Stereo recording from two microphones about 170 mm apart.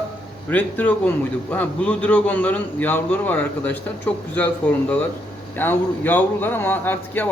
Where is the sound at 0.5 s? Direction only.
10° left (ahead or behind).